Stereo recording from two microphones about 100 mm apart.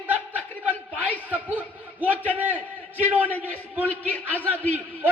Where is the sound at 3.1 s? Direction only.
15° right (ahead or behind).